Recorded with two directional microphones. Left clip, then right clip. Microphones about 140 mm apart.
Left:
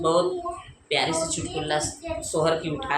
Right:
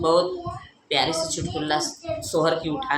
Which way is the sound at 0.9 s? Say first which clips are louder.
Right 1 dB; 25° right (ahead or behind).